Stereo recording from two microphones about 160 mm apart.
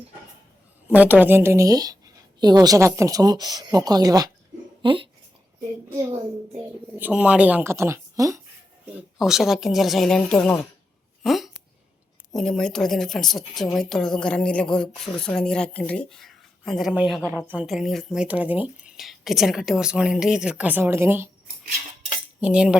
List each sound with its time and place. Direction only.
0.9 s a woman's voice: 10° right (ahead or behind); by 5.0 s 30° right (ahead or behind)
7.0 s a woman's voice: 5° right (ahead or behind)
9.0 s speech: centre (ahead or behind)
22.4 s cutlery: 5° right (ahead or behind)